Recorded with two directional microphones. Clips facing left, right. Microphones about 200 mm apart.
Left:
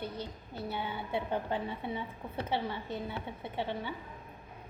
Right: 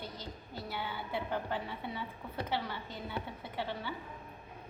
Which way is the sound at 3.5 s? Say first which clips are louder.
Left 2 dB; 25° left (ahead or behind).